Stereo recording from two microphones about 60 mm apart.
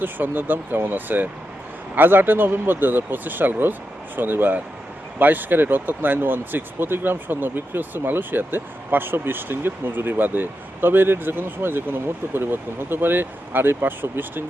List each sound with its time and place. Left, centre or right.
0.0 s speech: right